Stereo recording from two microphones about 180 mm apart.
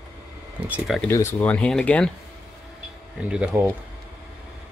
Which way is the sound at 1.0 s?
15° left (ahead or behind).